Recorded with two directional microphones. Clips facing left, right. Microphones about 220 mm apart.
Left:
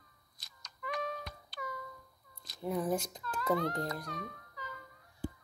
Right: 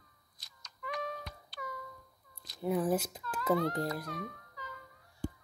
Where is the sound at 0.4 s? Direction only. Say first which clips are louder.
Left 1 dB; 55° left (ahead or behind).